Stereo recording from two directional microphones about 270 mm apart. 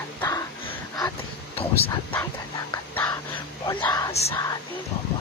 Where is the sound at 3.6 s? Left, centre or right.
Centre.